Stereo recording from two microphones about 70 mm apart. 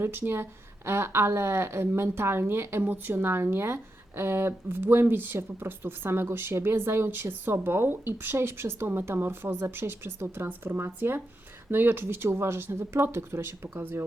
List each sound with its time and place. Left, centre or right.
0.0 s speech: right